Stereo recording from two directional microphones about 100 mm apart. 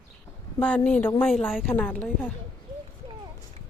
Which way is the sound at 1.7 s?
20° left (ahead or behind).